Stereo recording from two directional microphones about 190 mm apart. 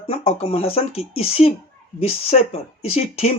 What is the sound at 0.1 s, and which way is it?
Speech, 30° left (ahead or behind).